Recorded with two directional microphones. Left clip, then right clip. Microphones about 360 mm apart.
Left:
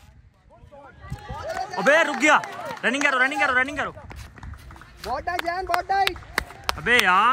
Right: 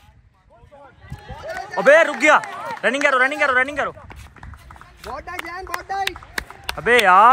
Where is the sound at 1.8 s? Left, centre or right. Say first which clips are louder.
Right 6 dB; centre.